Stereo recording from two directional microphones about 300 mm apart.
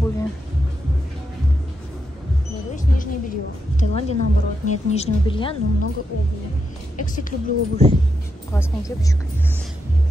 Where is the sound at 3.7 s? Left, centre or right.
Left.